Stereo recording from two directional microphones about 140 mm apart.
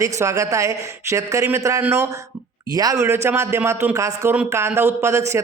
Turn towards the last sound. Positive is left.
turn(degrees=-20)  # may be behind; listen again after turning